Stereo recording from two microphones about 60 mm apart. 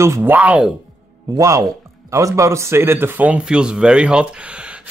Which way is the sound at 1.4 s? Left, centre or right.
Right.